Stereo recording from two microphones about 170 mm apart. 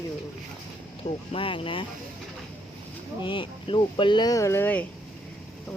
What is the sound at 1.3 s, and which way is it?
Speech, 30° left (ahead or behind).